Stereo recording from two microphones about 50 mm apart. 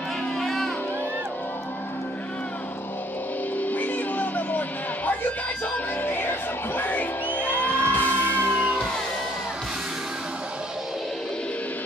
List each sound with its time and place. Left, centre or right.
0.4 s music: centre
3.5 s music: left
8.5 s music: right